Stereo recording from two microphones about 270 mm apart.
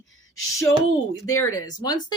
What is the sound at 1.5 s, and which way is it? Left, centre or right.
Speech, centre.